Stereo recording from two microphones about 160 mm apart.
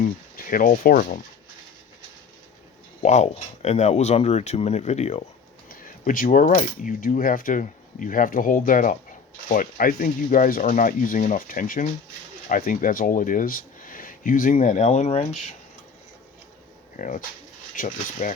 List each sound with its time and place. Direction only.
0.0 s speech: 60° left (ahead or behind)
3.0 s speech: 45° left (ahead or behind)
6.1 s coin: 55° left (ahead or behind)
12.5 s speech: 55° left (ahead or behind)
17.0 s coin: 55° left (ahead or behind)
17.7 s speech: 55° left (ahead or behind)